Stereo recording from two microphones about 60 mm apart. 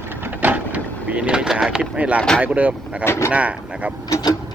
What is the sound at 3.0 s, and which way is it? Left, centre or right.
Speech, left.